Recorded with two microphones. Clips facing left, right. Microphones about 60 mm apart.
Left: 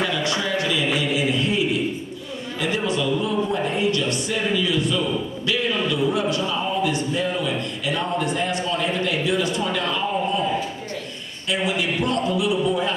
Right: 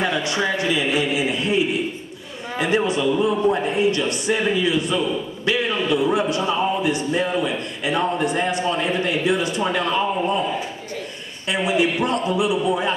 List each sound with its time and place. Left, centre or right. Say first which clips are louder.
0.4 s a sound: right 2 dB; right
2.6 s a man's voice: right 4 dB; right
11.6 s a man's voice: right 4 dB; right